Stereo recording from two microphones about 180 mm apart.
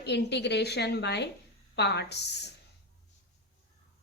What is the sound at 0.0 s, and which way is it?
A woman's voice, 70° left (ahead or behind).